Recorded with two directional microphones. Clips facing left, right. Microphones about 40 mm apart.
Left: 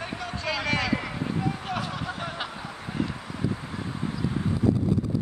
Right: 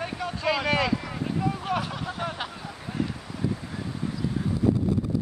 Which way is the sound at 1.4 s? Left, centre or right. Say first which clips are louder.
Right 4 dB; centre.